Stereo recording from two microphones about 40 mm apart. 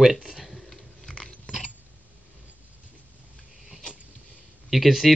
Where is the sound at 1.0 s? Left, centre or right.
Left.